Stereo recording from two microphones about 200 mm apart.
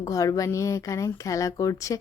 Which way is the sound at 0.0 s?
15° left (ahead or behind).